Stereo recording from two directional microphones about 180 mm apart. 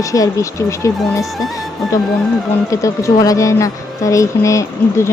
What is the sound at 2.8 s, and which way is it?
A woman's voice, 15° left (ahead or behind).